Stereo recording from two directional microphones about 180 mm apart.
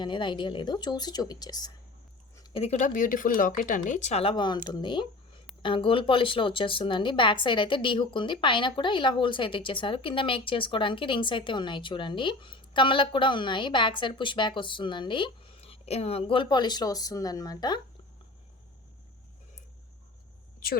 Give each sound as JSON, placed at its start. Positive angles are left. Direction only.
{"t": 0.0, "sound": "speech", "side_deg": 25}